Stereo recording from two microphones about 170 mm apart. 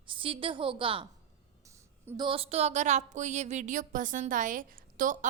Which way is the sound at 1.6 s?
20° right (ahead or behind).